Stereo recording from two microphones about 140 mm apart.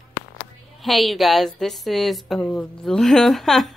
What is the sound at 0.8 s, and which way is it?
A woman's voice, centre (ahead or behind).